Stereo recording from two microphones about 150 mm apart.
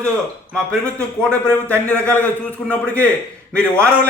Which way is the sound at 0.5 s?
5° left (ahead or behind).